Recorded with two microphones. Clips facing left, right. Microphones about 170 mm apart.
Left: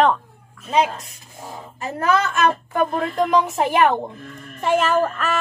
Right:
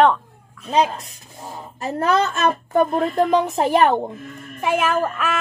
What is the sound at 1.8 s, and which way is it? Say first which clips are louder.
A woman's voice: right 1 dB; 35° right (ahead or behind).